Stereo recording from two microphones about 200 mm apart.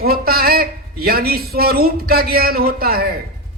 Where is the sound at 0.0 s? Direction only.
50° right (ahead or behind).